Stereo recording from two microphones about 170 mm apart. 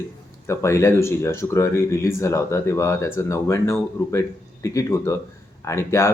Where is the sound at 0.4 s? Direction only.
15° left (ahead or behind).